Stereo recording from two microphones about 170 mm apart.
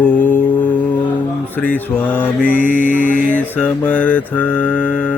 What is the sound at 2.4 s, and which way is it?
Mantra, 55° left (ahead or behind).